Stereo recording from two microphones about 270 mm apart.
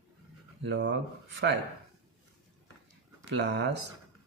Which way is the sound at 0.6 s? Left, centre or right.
Right.